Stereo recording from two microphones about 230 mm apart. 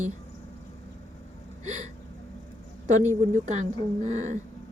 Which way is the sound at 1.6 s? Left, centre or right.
Right.